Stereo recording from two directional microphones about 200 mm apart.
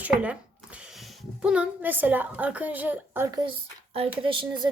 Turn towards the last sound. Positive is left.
turn(degrees=-25)  # may be behind; listen again after turning